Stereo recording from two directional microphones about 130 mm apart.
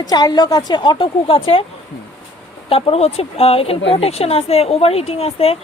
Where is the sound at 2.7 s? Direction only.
45° left (ahead or behind).